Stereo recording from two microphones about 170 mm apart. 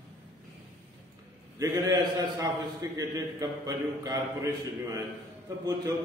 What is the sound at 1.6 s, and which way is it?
A man's voice, 20° right (ahead or behind).